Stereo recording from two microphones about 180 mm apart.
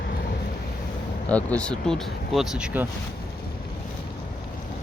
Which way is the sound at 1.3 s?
10° left (ahead or behind).